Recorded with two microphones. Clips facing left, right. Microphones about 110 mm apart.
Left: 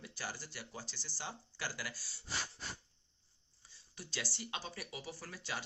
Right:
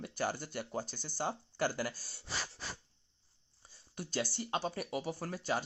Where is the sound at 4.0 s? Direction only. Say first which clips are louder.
Right 8 dB; 50° right (ahead or behind).